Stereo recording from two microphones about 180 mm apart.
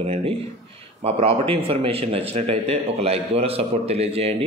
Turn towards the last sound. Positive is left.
turn(degrees=-35)  # may be behind; listen again after turning